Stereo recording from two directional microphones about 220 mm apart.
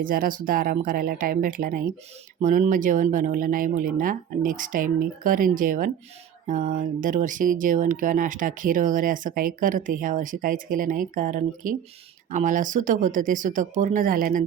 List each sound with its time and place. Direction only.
0.0 s speech: 40° right (ahead or behind)